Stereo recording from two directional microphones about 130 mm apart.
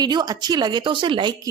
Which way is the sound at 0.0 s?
30° right (ahead or behind).